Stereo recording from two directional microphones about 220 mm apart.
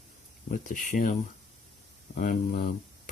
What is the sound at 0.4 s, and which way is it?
Speech, 40° left (ahead or behind).